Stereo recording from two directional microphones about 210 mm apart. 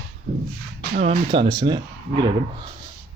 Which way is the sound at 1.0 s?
25° right (ahead or behind).